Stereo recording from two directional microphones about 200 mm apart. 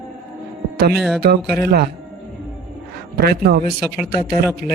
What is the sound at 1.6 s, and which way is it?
Speech, 50° right (ahead or behind).